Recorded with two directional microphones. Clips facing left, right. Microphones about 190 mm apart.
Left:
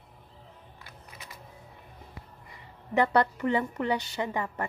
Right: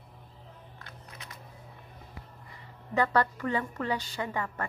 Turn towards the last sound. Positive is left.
turn(degrees=20)  # may be behind; listen again after turning